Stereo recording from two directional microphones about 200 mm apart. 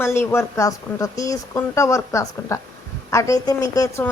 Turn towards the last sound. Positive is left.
turn(degrees=15)  # may be behind; listen again after turning